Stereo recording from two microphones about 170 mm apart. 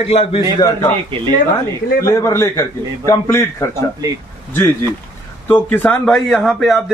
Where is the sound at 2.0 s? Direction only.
20° left (ahead or behind).